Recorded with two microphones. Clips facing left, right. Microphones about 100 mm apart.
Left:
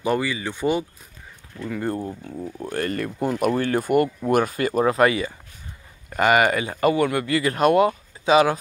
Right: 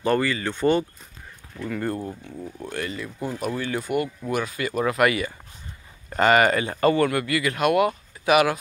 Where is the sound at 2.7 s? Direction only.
50° left (ahead or behind); by 5.3 s 25° left (ahead or behind).